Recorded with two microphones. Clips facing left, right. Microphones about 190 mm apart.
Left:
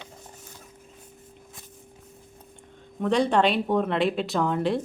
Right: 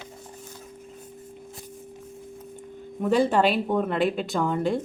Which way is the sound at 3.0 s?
5° right (ahead or behind).